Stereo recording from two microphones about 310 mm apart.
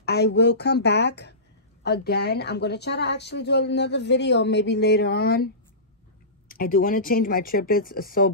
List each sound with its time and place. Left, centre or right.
0.0 s a woman's voice: left
6.5 s speech: left